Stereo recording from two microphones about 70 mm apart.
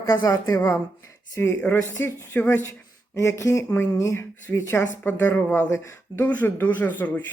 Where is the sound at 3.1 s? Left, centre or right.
Left.